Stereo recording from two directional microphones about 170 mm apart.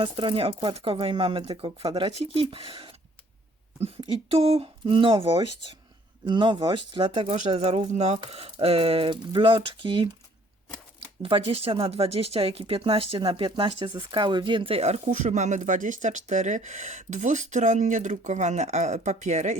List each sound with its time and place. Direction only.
0.0 s speech: 30° right (ahead or behind)
4.0 s speech: 35° right (ahead or behind)
11.2 s speech: 35° right (ahead or behind)